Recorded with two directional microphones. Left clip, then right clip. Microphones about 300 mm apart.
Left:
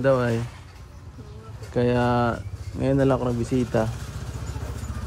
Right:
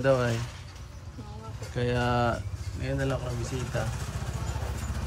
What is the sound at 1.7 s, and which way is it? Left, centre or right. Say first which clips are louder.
Speech: left 6 dB; centre.